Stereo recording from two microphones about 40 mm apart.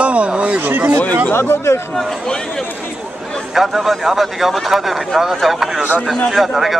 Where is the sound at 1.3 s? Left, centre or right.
Left.